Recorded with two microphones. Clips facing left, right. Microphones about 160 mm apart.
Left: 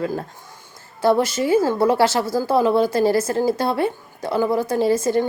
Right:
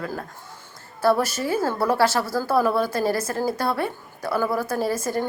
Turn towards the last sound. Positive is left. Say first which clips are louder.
# left 6 dB
turn(degrees=20)  # may be behind; listen again after turning